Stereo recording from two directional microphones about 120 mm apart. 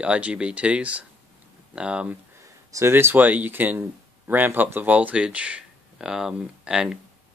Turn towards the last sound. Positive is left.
turn(degrees=-5)  # may be behind; listen again after turning